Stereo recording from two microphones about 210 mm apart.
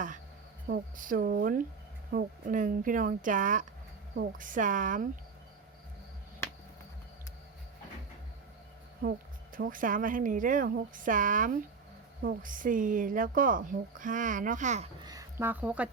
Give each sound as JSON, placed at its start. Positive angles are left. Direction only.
{"t": 0.7, "sound": "a woman's voice", "side_deg": -40}
{"t": 9.0, "sound": "a woman's voice", "side_deg": -45}
{"t": 15.0, "sound": "a woman's voice", "side_deg": -15}